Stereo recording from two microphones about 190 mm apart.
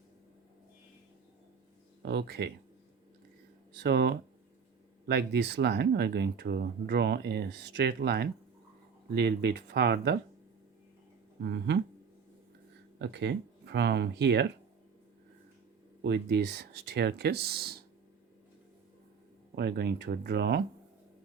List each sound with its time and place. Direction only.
2.0 s speech: 65° right (ahead or behind)
3.8 s speech: 60° right (ahead or behind)
11.3 s speech: 65° right (ahead or behind)
13.0 s speech: 65° right (ahead or behind)
16.0 s speech: 60° right (ahead or behind)
19.5 s speech: 55° right (ahead or behind)